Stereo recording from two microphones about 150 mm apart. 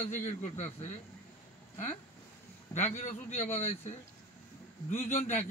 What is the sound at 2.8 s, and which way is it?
A man's voice, 45° left (ahead or behind).